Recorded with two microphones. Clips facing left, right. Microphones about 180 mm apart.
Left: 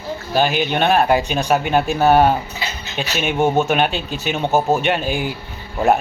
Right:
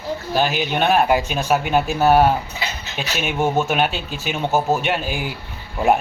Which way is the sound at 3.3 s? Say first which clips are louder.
Left 3 dB; 20° left (ahead or behind).